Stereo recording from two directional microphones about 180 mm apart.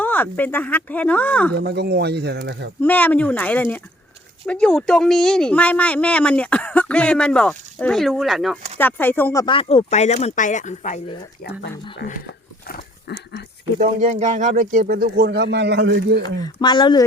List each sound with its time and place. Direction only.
0.0 s speech: 10° left (ahead or behind)
1.5 s speech: 65° right (ahead or behind)
2.8 s speech: 10° left (ahead or behind)
8.8 s speech: 10° left (ahead or behind)
9.5 s speech: 30° left (ahead or behind)
12.2 s dog: 60° left (ahead or behind)
13.7 s speech: 40° right (ahead or behind); by 16.2 s 65° right (ahead or behind)
16.4 s speech: 25° left (ahead or behind)